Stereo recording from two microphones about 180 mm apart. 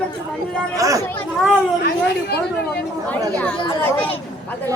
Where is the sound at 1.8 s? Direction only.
60° left (ahead or behind).